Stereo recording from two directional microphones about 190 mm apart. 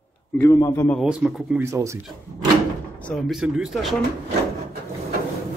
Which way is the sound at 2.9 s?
5° left (ahead or behind).